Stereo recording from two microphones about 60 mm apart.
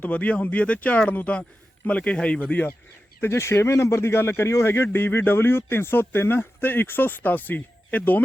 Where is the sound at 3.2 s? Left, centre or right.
Left.